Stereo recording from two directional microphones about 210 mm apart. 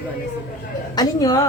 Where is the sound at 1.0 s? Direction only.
15° left (ahead or behind).